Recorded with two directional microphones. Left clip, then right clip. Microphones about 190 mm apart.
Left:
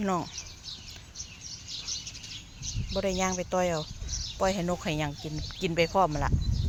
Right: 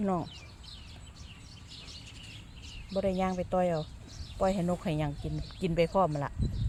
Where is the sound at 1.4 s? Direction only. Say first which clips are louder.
Left 11 dB; 60° right (ahead or behind).